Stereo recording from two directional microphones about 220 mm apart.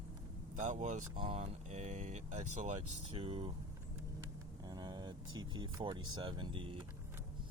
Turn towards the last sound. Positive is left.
turn(degrees=-25)  # may be behind; listen again after turning